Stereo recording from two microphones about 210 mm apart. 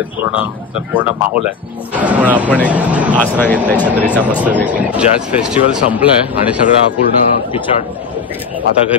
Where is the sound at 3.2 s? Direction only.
10° left (ahead or behind).